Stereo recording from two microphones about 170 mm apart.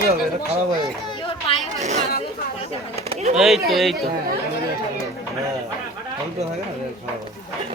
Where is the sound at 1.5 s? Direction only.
35° left (ahead or behind).